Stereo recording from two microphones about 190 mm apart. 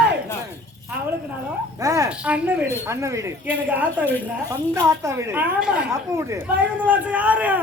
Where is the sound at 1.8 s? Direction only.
15° right (ahead or behind).